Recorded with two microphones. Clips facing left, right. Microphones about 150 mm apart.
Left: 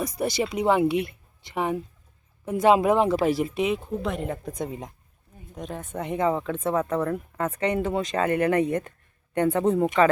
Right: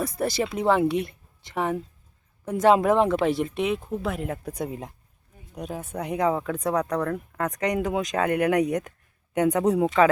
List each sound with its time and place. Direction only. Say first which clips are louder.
0.0 s a woman's voice: even; centre (ahead or behind)